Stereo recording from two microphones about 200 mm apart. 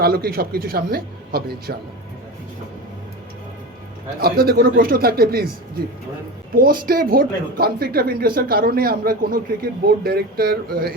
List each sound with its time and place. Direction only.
0.0 s a man's voice: 50° right (ahead or behind)
4.2 s a man's voice: 50° right (ahead or behind)
6.5 s a man's voice: 45° right (ahead or behind)